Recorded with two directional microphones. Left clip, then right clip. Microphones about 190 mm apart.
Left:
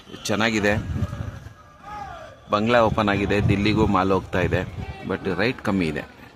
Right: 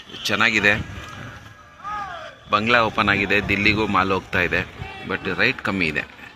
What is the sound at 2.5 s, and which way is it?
Speech, 30° left (ahead or behind).